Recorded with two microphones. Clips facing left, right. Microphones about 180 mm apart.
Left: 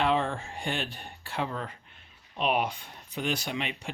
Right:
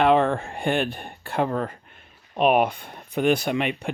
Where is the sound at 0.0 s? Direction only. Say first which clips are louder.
Right 8 dB; 60° right (ahead or behind).